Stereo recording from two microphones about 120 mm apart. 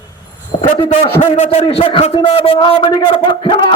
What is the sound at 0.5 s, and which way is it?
Speech, 40° left (ahead or behind).